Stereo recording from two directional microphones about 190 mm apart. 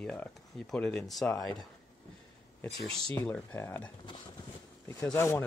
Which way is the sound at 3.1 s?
10° left (ahead or behind).